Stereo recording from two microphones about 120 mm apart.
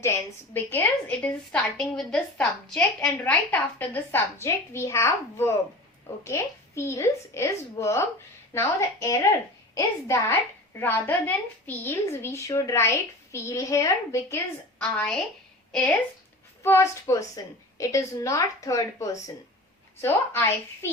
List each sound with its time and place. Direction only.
0.0 s a woman's voice: 20° left (ahead or behind)
14.8 s a woman's voice: 10° left (ahead or behind)
16.6 s a woman's voice: 25° left (ahead or behind)